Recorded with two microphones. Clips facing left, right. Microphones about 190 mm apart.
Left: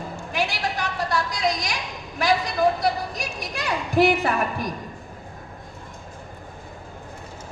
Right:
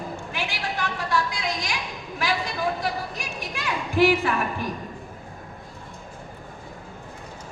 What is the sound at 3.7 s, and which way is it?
A woman's voice, 40° left (ahead or behind).